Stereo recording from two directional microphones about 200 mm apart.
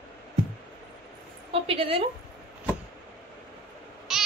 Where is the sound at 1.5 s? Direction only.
30° right (ahead or behind).